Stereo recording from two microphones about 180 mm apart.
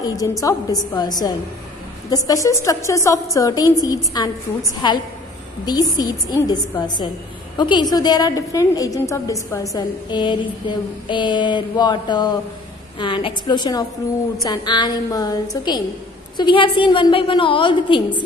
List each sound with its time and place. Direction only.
0.0 s a woman's voice: 20° left (ahead or behind)